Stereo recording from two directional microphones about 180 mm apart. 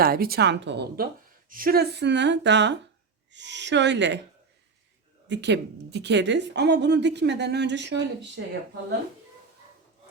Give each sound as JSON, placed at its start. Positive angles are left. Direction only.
{"t": 0.0, "sound": "a woman's voice", "side_deg": -55}
{"t": 1.5, "sound": "a woman's voice", "side_deg": -50}
{"t": 5.3, "sound": "a woman's voice", "side_deg": -75}